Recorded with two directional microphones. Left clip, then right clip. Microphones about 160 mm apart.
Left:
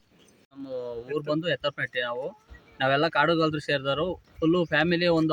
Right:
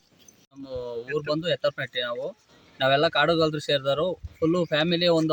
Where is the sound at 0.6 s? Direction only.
Centre (ahead or behind).